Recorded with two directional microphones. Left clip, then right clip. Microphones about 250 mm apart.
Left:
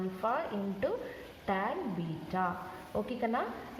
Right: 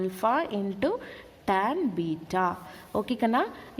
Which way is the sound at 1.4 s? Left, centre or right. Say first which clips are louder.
Right 8 dB; right.